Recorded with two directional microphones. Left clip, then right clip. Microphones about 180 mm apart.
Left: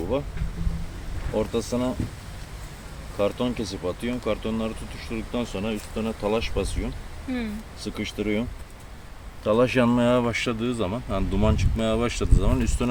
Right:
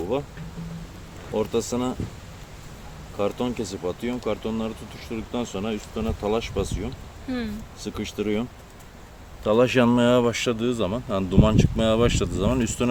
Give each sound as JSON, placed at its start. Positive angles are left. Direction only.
{"t": 0.1, "sound": "speech", "side_deg": -30}
{"t": 1.4, "sound": "speech", "side_deg": -30}
{"t": 3.2, "sound": "speech", "side_deg": -30}
{"t": 7.3, "sound": "speech", "side_deg": -15}
{"t": 7.8, "sound": "speech", "side_deg": -30}